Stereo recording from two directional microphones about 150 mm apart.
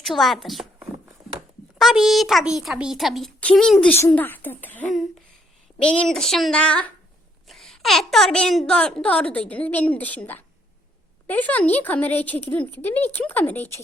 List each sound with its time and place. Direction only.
0.0 s a child's voice: centre (ahead or behind)
1.2 s a sound: 25° right (ahead or behind)
1.8 s a child's voice: centre (ahead or behind)